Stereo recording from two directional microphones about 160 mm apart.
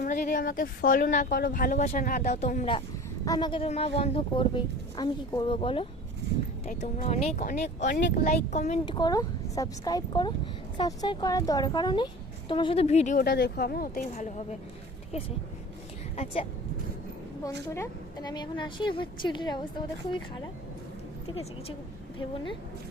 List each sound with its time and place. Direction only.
0.0 s speech: 60° left (ahead or behind)
1.3 s speech: 70° left (ahead or behind); by 2.6 s 45° left (ahead or behind)
3.2 s speech: 25° left (ahead or behind)
6.7 s speech: 45° left (ahead or behind)
7.4 s speech: 55° left (ahead or behind)
8.9 s a woman's voice: 25° left (ahead or behind); by 13.2 s 45° left (ahead or behind)
13.2 s speech: 75° left (ahead or behind)
14.2 s speech: 45° left (ahead or behind)
16.1 s speech: 40° left (ahead or behind)
17.7 s a woman's voice: 25° left (ahead or behind)